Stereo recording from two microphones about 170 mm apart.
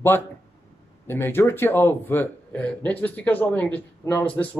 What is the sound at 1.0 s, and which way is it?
Speech, 15° left (ahead or behind).